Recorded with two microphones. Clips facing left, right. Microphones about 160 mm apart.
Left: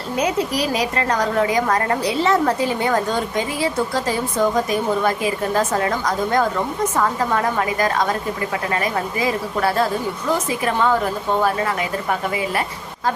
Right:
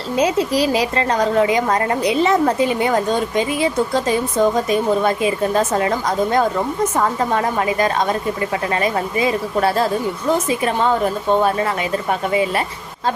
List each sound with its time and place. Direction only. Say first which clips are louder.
0.2 s a woman's voice: right 4 dB; 30° right (ahead or behind)